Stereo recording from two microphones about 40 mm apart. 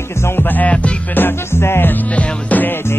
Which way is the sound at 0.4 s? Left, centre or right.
Left.